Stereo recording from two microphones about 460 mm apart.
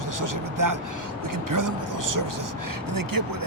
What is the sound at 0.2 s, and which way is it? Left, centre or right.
Vehicle, right.